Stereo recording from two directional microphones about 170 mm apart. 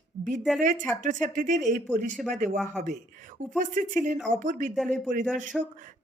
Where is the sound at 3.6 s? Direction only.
50° right (ahead or behind).